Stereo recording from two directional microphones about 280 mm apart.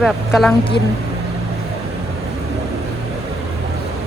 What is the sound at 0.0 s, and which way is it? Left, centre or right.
Speech, centre.